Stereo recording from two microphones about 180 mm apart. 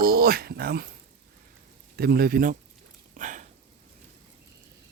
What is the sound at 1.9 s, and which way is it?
Speech, 55° right (ahead or behind).